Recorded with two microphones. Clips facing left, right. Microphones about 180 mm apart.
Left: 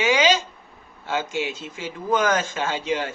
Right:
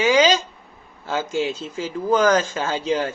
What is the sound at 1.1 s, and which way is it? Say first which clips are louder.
Speech: right 3 dB; 35° right (ahead or behind).